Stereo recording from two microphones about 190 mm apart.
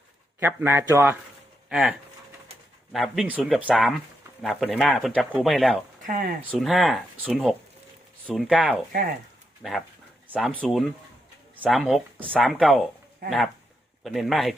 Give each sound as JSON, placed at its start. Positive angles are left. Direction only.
{"t": 0.3, "sound": "speech", "side_deg": -10}
{"t": 1.7, "sound": "speech", "side_deg": -5}
{"t": 6.1, "sound": "speech", "side_deg": -45}
{"t": 6.4, "sound": "speech", "side_deg": -5}
{"t": 14.0, "sound": "speech", "side_deg": 0}